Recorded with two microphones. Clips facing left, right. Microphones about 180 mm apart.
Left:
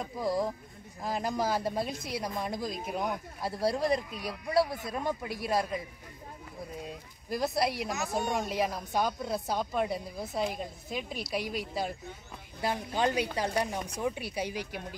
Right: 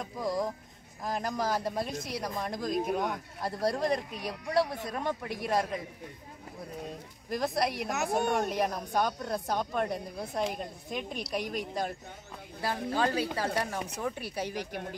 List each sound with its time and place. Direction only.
0.0 s speech: 5° left (ahead or behind)
7.2 s speech: 5° left (ahead or behind)
7.8 s a woman's voice: 65° right (ahead or behind)
8.5 s speech: 5° left (ahead or behind)
12.6 s speech: 20° left (ahead or behind)